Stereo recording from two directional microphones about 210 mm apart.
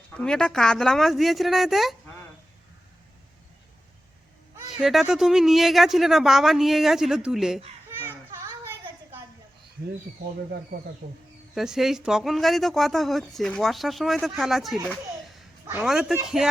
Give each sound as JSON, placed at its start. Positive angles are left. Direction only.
{"t": 0.2, "sound": "speech", "side_deg": 5}
{"t": 4.5, "sound": "speech", "side_deg": 0}
{"t": 11.0, "sound": "speech", "side_deg": -45}
{"t": 11.5, "sound": "speech", "side_deg": 0}